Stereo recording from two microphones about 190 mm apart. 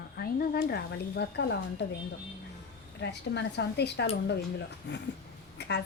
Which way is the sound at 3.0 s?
60° left (ahead or behind).